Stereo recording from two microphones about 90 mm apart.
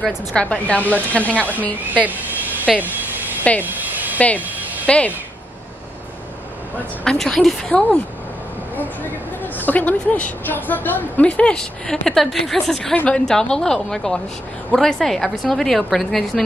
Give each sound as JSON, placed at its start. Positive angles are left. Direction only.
{"t": 0.0, "sound": "a woman's voice", "side_deg": 10}
{"t": 1.9, "sound": "speech", "side_deg": -20}
{"t": 2.7, "sound": "a woman's voice", "side_deg": 0}
{"t": 3.5, "sound": "a woman's voice", "side_deg": 15}
{"t": 7.1, "sound": "a woman's voice", "side_deg": 10}
{"t": 9.4, "sound": "a woman's voice", "side_deg": 20}
{"t": 12.9, "sound": "a woman's voice", "side_deg": 15}